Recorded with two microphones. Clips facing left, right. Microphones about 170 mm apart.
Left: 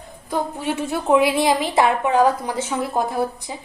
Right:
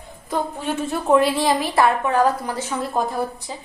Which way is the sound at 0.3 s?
10° left (ahead or behind).